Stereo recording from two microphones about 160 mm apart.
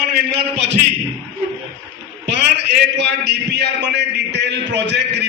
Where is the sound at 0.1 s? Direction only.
90° right.